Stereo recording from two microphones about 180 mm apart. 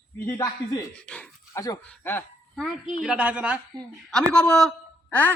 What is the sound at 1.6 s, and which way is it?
Speech, 15° left (ahead or behind).